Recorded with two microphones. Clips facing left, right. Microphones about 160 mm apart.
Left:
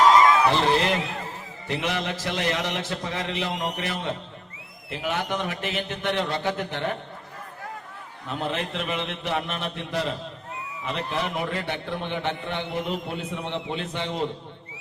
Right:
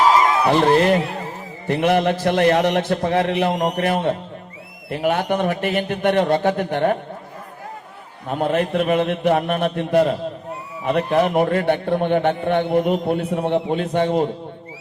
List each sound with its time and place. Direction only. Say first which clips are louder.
0.4 s a man's voice: right 6 dB; 50° right (ahead or behind)
8.3 s a man's voice: right 9 dB; 50° right (ahead or behind)